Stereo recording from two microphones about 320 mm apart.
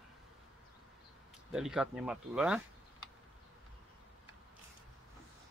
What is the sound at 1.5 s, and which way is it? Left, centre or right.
Speech, centre.